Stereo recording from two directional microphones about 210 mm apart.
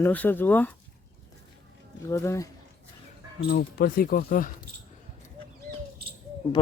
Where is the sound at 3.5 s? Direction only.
45° left (ahead or behind).